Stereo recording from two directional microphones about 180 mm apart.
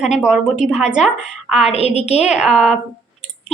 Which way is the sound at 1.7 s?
35° left (ahead or behind).